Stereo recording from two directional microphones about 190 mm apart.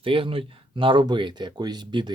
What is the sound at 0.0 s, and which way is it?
Speech, 30° right (ahead or behind).